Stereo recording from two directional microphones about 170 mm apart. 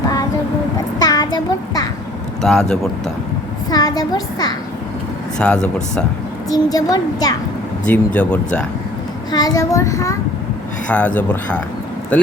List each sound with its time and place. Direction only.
0.9 s child singing: 25° left (ahead or behind)
2.4 s speech: centre (ahead or behind)
3.7 s a child's voice: 20° left (ahead or behind)
5.4 s speech: 5° left (ahead or behind)
6.5 s a child's voice: 20° left (ahead or behind)
7.9 s speech: 10° left (ahead or behind)
9.3 s a child's voice: 20° left (ahead or behind)
10.8 s speech: 10° left (ahead or behind)